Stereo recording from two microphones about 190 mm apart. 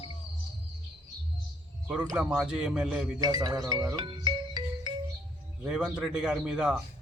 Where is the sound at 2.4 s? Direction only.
5° right (ahead or behind).